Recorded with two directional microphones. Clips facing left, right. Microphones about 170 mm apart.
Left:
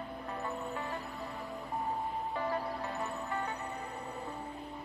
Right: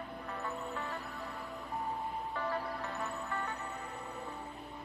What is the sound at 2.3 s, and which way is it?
Music, 15° left (ahead or behind).